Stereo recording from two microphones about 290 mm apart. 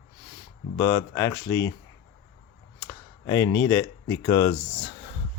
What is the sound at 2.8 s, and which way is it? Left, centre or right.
Speech, centre.